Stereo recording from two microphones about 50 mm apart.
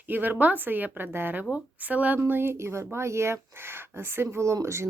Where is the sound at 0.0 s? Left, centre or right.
Right.